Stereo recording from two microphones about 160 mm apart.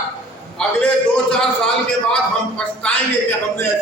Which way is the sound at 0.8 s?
5° left (ahead or behind).